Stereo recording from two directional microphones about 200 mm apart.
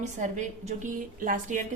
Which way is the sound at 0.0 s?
35° right (ahead or behind).